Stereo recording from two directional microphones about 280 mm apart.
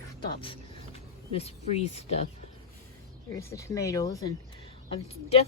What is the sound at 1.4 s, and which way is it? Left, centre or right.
Speech, left.